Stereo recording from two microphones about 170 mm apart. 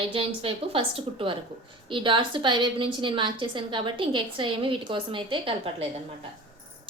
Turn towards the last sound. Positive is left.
turn(degrees=-30)  # may be behind; listen again after turning